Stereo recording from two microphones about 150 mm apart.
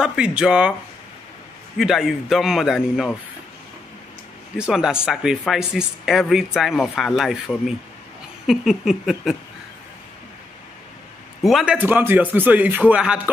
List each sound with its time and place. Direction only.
0.0 s speech: 5° right (ahead or behind)
1.8 s speech: centre (ahead or behind)
4.6 s speech: 5° right (ahead or behind)
11.4 s speech: 5° right (ahead or behind)